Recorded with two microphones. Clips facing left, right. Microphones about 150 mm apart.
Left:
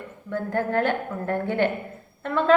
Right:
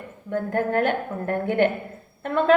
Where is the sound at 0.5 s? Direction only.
20° right (ahead or behind).